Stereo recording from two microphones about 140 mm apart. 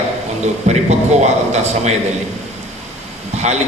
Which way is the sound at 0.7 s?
55° right (ahead or behind).